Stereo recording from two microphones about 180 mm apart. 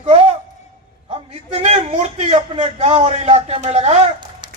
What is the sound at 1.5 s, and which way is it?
Speech, 40° right (ahead or behind).